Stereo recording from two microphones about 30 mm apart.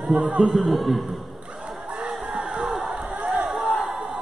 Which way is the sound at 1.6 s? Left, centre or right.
Right.